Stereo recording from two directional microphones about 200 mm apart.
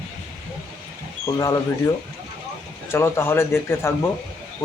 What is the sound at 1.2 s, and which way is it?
Speech, 15° left (ahead or behind).